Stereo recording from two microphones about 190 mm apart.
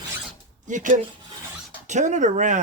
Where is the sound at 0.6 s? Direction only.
40° right (ahead or behind).